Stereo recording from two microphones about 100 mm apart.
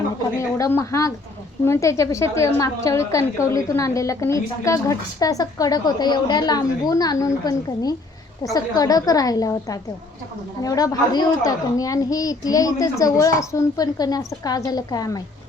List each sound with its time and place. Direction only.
0.7 s a woman's voice: 30° left (ahead or behind)